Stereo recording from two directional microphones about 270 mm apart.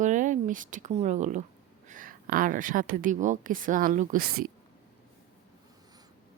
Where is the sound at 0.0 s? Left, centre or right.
Right.